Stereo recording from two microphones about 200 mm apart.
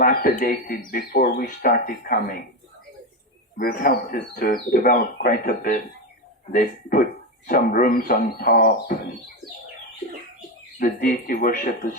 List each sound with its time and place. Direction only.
0.0 s speech: 50° left (ahead or behind)
3.6 s speech: 50° left (ahead or behind)
10.8 s speech: 40° left (ahead or behind)